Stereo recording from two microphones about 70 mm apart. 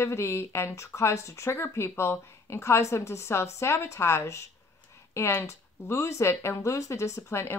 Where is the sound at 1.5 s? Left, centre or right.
Left.